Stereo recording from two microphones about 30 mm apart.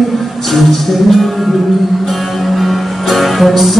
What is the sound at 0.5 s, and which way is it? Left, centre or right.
Speech, centre.